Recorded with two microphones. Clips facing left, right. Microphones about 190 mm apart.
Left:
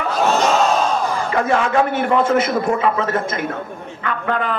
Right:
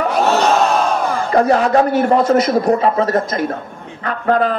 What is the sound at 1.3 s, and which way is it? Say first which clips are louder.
A woman's voice: right 6 dB; 35° right (ahead or behind).